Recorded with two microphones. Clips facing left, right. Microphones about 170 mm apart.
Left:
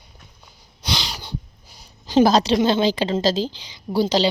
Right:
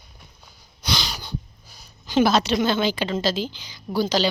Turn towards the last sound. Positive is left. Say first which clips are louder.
# left 3 dB
turn(degrees=30)  # may be behind; listen again after turning